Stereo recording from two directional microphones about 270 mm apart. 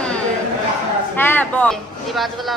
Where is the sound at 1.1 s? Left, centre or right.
Centre.